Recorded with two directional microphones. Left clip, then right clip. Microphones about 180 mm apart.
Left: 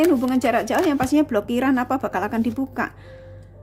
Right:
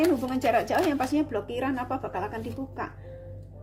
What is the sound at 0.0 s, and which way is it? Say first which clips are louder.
Speech: left 6 dB; 25° left (ahead or behind).